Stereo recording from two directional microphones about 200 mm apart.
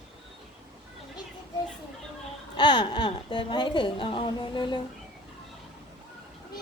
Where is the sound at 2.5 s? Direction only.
20° left (ahead or behind).